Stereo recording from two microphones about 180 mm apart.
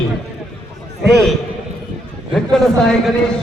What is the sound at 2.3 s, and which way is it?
Speech, 5° left (ahead or behind).